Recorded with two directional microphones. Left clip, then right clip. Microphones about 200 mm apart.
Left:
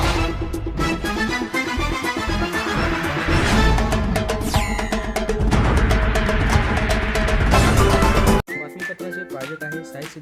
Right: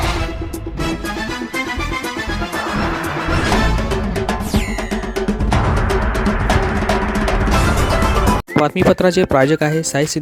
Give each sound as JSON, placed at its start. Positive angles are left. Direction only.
{"t": 7.8, "sound": "music", "side_deg": 0}
{"t": 8.6, "sound": "speech", "side_deg": -55}